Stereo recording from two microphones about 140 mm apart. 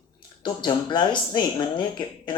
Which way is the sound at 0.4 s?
35° left (ahead or behind).